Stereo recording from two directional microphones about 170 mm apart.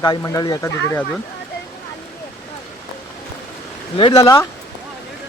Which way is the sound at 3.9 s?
25° left (ahead or behind).